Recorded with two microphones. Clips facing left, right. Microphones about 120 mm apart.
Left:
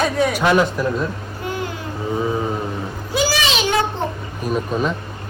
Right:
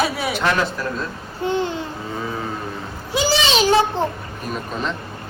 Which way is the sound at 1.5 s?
25° right (ahead or behind).